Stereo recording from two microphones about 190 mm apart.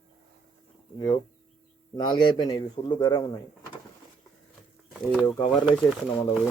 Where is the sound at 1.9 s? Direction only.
25° left (ahead or behind).